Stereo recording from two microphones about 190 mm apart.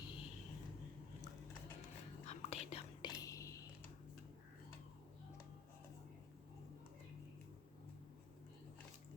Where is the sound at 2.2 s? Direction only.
35° left (ahead or behind).